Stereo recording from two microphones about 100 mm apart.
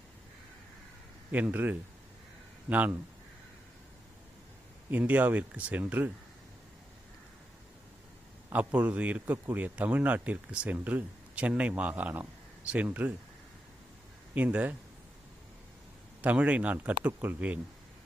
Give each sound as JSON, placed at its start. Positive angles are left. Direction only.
{"t": 1.3, "sound": "speech", "side_deg": -15}
{"t": 4.9, "sound": "speech", "side_deg": -15}
{"t": 8.5, "sound": "speech", "side_deg": -15}
{"t": 14.3, "sound": "speech", "side_deg": -15}
{"t": 16.2, "sound": "speech", "side_deg": -15}